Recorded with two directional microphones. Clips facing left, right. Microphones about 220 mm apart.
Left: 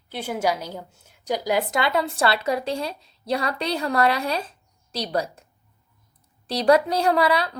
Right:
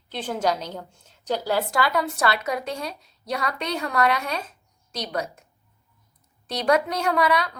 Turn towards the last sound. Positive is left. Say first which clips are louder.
# left 2 dB
turn(degrees=30)  # may be behind; listen again after turning